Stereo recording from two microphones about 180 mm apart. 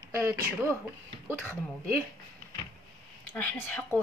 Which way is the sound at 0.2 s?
15° right (ahead or behind).